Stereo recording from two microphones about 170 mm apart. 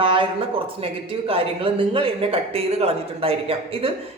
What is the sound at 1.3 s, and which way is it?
A woman's voice, 35° right (ahead or behind).